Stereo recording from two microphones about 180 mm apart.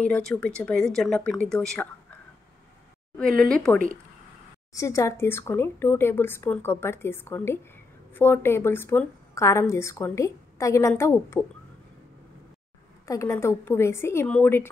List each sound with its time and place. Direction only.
0.0 s speech: 5° left (ahead or behind)
3.2 s speech: 5° left (ahead or behind)
4.7 s a woman's voice: 15° left (ahead or behind)
13.0 s a woman's voice: 15° left (ahead or behind)